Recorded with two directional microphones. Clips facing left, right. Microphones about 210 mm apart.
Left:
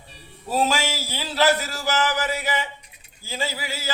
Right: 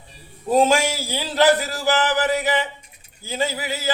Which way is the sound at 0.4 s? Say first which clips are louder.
Right 6 dB; 20° right (ahead or behind).